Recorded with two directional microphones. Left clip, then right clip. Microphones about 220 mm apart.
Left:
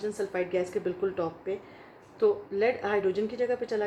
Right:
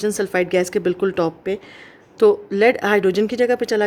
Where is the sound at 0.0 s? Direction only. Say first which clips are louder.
Right 11 dB; 55° right (ahead or behind).